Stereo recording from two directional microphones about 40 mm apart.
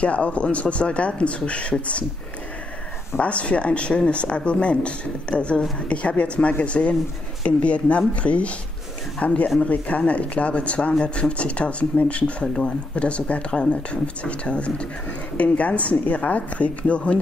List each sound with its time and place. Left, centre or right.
0.0 s speech: left
3.2 s speech: left
15.3 s speech: left